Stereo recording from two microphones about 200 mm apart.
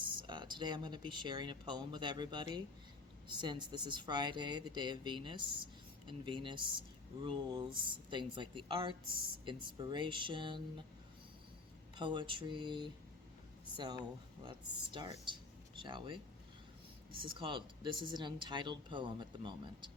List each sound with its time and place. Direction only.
0.0 s speech: 25° right (ahead or behind)
11.9 s speech: 25° right (ahead or behind)
17.2 s speech: 25° right (ahead or behind)